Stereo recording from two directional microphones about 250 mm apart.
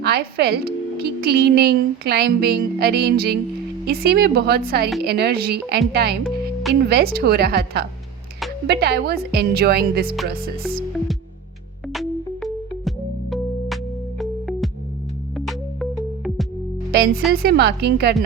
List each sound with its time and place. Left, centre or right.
0.0 s a woman's voice: right
6.2 s music: centre
6.8 s a woman's voice: right
11.9 s music: centre
14.2 s music: centre
16.9 s a woman's voice: right